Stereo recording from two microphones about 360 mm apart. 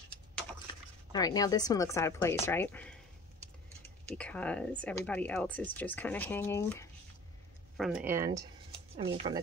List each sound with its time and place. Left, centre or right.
1.1 s speech: centre
4.1 s speech: centre